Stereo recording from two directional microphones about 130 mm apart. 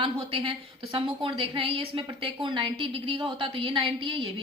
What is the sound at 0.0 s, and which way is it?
A woman's voice, 45° right (ahead or behind).